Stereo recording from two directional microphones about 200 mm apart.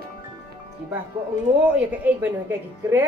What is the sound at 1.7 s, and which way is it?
A woman's voice, 5° right (ahead or behind).